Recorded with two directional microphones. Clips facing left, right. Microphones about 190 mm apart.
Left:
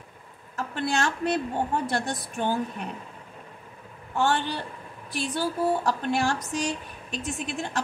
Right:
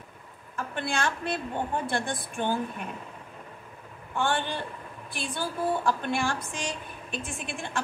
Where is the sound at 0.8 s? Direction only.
40° left (ahead or behind).